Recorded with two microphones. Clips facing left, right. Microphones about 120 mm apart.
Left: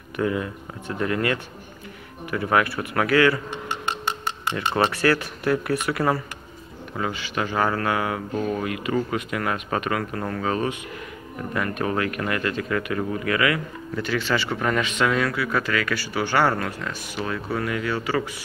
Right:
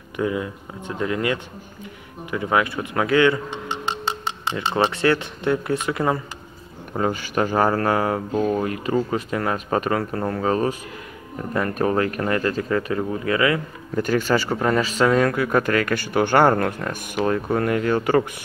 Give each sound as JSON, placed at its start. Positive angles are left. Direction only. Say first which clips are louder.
{"t": 0.2, "sound": "speech", "louder": "right 1 dB", "side_deg": -15}
{"t": 6.9, "sound": "speech", "louder": "right 5 dB", "side_deg": -45}
{"t": 8.3, "sound": "speech", "louder": "right 4 dB", "side_deg": -20}
{"t": 8.6, "sound": "speech", "louder": "right 2 dB", "side_deg": -35}
{"t": 13.9, "sound": "speech", "louder": "right 5 dB", "side_deg": -45}